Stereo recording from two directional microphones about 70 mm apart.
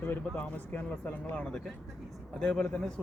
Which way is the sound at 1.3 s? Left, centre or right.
Centre.